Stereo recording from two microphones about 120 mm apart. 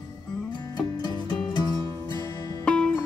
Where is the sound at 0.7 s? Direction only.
35° left (ahead or behind).